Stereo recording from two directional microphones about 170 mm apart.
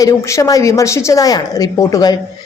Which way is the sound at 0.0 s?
20° left (ahead or behind).